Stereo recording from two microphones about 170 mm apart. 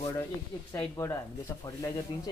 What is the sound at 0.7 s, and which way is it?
Speech, 20° left (ahead or behind).